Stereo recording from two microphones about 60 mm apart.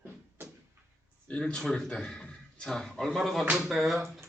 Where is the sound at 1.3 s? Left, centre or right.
Centre.